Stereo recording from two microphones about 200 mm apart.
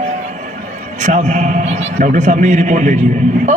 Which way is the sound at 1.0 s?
35° right (ahead or behind).